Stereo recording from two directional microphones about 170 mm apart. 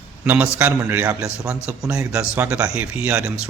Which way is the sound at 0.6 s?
10° right (ahead or behind).